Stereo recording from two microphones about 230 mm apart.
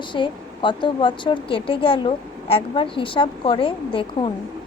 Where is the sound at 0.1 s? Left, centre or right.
Left.